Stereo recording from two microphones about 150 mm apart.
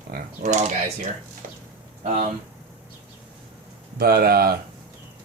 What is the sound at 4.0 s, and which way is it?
Speech, 90° right.